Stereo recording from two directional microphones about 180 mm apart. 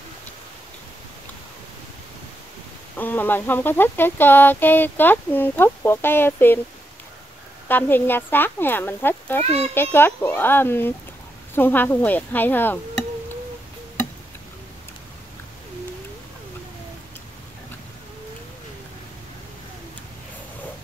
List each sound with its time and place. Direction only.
3.0 s speech: 10° left (ahead or behind)
7.6 s speech: 10° left (ahead or behind)
9.4 s a child's voice: 35° right (ahead or behind)
9.8 s speech: 10° left (ahead or behind)